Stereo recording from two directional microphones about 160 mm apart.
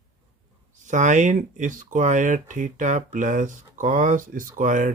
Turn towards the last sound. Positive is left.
turn(degrees=-55)  # may be behind; listen again after turning